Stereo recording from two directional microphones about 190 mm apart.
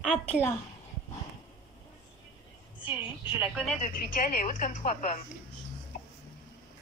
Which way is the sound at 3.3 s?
10° right (ahead or behind).